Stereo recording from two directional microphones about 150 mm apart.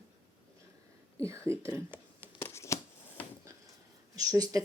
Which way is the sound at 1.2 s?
20° right (ahead or behind).